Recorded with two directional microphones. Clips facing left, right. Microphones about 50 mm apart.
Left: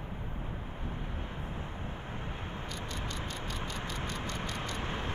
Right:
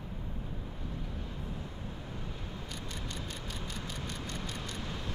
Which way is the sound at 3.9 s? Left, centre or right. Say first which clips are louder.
Left 3 dB; left.